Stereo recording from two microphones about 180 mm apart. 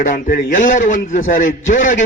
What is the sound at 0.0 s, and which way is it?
A man's voice, 50° left (ahead or behind).